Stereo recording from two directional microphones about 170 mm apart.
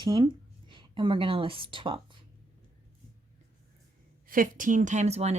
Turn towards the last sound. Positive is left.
turn(degrees=-40)  # may be behind; listen again after turning